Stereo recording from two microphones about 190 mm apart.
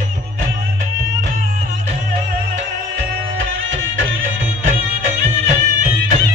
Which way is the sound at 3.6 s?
90° right.